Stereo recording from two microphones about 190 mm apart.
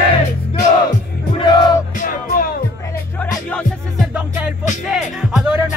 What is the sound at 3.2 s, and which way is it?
Music, 5° left (ahead or behind).